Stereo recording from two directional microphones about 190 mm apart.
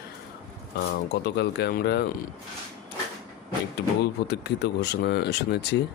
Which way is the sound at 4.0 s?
60° left (ahead or behind).